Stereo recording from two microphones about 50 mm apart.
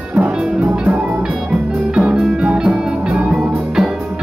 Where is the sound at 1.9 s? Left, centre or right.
Right.